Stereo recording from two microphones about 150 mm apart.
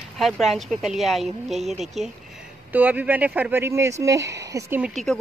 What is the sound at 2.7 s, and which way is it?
Speech, 10° right (ahead or behind).